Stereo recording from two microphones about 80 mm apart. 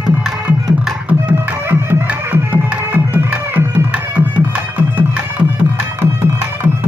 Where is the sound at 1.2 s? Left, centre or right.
Right.